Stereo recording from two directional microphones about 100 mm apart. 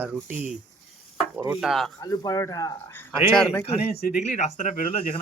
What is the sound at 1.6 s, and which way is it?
Speech, 5° right (ahead or behind).